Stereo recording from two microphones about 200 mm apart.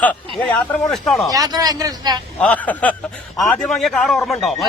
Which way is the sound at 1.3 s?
20° right (ahead or behind).